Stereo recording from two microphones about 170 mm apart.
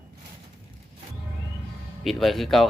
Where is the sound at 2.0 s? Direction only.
Centre (ahead or behind).